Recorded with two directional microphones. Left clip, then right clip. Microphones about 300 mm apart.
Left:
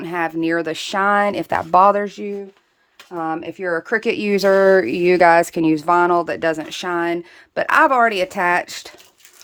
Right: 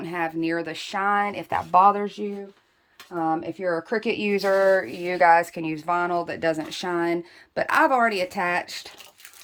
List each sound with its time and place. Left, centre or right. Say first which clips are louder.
0.0 s speech: left 6 dB; centre